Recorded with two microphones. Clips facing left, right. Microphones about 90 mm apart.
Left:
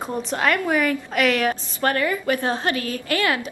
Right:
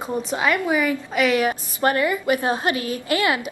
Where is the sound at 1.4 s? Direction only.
15° right (ahead or behind).